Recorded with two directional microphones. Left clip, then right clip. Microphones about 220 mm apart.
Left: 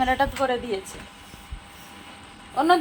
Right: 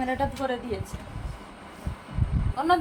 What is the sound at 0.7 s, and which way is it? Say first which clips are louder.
Speech: left 4 dB; 30° left (ahead or behind).